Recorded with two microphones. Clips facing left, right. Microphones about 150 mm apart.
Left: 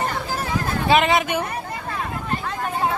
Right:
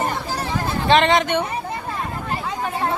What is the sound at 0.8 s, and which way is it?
Speech, 5° left (ahead or behind).